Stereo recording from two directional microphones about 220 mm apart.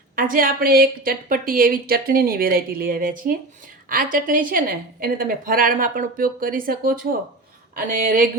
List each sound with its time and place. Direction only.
0.2 s a woman's voice: 40° right (ahead or behind)